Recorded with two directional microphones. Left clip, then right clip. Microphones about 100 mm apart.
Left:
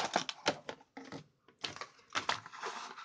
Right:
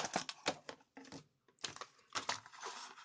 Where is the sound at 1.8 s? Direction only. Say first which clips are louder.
Left 7 dB; 20° right (ahead or behind).